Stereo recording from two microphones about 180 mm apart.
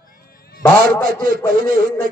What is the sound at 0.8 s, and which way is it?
Speech, 50° right (ahead or behind).